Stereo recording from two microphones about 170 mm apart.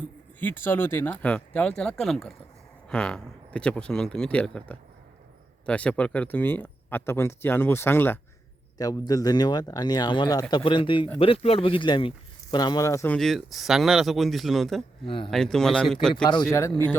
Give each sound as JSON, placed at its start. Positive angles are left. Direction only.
{"t": 0.3, "sound": "speech", "side_deg": 10}
{"t": 13.1, "sound": "speech", "side_deg": 0}
{"t": 15.0, "sound": "speech", "side_deg": 30}
{"t": 15.3, "sound": "speech", "side_deg": 5}
{"t": 16.5, "sound": "speech", "side_deg": 15}